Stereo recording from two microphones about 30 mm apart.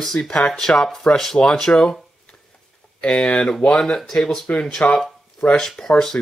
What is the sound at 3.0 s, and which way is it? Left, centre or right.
Speech, left.